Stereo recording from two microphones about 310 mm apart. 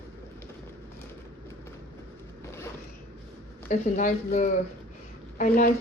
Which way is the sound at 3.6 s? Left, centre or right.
Left.